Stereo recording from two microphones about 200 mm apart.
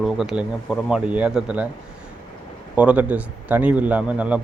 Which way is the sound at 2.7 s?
5° right (ahead or behind).